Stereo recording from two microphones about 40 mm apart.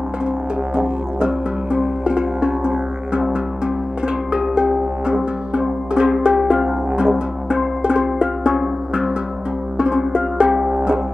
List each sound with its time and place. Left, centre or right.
0.7 s music: right
9.8 s music: right